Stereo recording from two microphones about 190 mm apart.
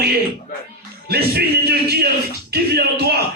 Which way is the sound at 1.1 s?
55° right (ahead or behind).